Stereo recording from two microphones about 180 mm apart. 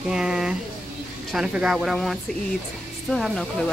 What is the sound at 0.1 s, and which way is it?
Speech, 5° right (ahead or behind).